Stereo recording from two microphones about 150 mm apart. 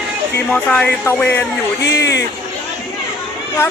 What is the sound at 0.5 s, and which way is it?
Speech, 10° left (ahead or behind).